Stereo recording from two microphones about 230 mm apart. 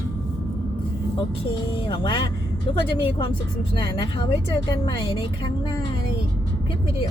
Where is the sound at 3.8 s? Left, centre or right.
Centre.